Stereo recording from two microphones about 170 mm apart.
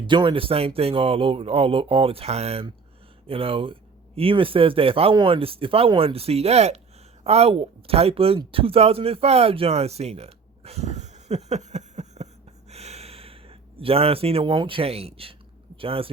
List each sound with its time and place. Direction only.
0.1 s speech: 30° right (ahead or behind)
12.7 s a sound: 40° right (ahead or behind)
15.8 s speech: 30° right (ahead or behind)